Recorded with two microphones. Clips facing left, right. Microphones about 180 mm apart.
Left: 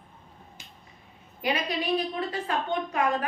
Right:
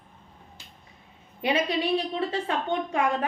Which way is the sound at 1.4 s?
25° right (ahead or behind).